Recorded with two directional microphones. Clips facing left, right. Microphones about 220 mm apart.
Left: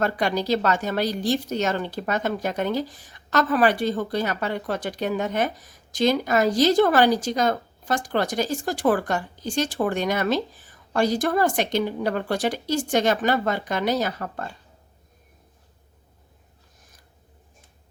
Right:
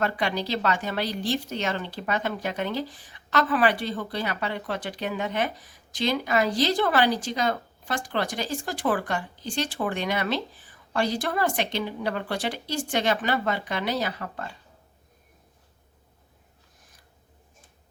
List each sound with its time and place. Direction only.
0.0 s a woman's voice: 45° left (ahead or behind)